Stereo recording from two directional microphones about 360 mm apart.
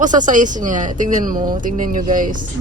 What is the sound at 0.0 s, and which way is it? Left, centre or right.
Speech, right.